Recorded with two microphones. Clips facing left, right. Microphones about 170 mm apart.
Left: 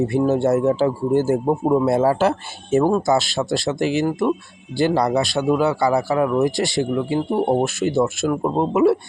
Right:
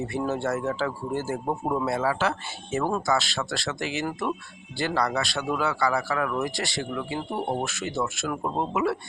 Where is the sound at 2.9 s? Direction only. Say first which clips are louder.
Left 7 dB; 25° left (ahead or behind).